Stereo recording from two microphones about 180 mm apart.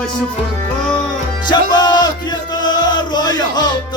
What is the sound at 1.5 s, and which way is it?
Music, 25° left (ahead or behind).